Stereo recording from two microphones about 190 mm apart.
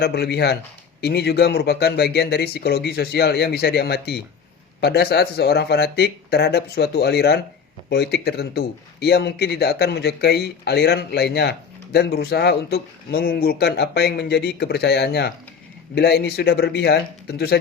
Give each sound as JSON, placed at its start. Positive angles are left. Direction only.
{"t": 0.0, "sound": "a man's voice", "side_deg": 55}